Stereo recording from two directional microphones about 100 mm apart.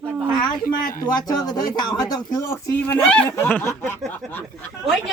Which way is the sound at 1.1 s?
40° left (ahead or behind).